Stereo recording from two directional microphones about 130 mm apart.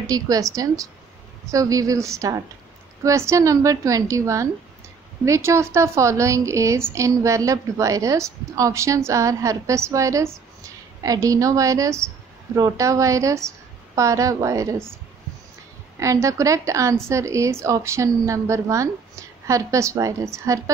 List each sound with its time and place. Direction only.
0.0 s a woman's voice: 25° right (ahead or behind)
16.0 s a woman's voice: 25° right (ahead or behind)